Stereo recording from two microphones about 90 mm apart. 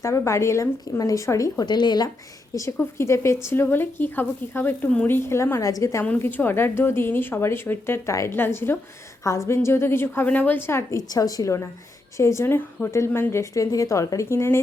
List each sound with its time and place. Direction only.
0.0 s a woman's voice: 35° left (ahead or behind)
1.6 s speech: 55° left (ahead or behind)
2.6 s a woman's voice: 30° left (ahead or behind)
6.1 s a woman's voice: 25° left (ahead or behind)
10.9 s a woman's voice: 40° left (ahead or behind)